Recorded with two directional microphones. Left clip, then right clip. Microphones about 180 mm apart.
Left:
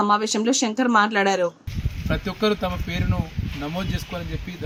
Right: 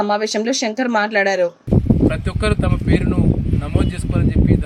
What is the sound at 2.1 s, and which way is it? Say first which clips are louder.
Speech: right 2 dB; 20° right (ahead or behind).